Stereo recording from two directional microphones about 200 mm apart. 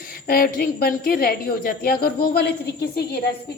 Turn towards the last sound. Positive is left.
turn(degrees=55)  # may be behind; listen again after turning